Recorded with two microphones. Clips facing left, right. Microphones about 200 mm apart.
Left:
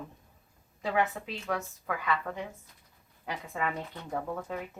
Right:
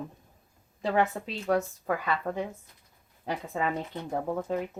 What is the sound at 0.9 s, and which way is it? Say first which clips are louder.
Speech: right 3 dB; 35° right (ahead or behind).